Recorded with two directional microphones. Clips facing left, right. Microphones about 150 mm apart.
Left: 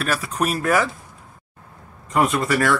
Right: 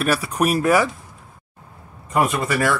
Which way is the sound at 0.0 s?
10° right (ahead or behind).